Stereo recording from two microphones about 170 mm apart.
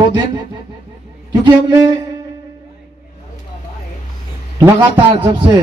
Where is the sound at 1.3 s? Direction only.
25° right (ahead or behind).